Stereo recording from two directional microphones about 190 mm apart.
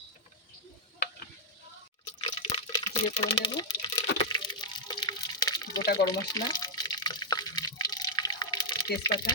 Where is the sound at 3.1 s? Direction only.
25° left (ahead or behind).